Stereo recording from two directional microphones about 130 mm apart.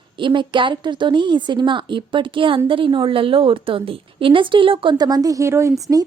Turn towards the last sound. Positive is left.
turn(degrees=-20)  # may be behind; listen again after turning